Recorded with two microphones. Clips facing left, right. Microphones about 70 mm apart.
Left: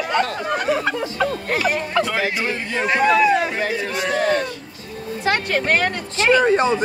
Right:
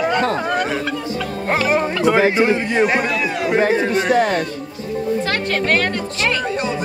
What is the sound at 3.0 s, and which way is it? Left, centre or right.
Speech, left.